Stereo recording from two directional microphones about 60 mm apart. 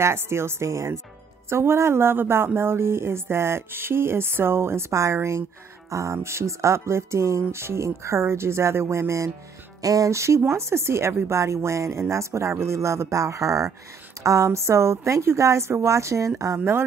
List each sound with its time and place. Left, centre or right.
0.0 s speech: right
1.5 s speech: right
9.8 s speech: right
16.5 s speech: right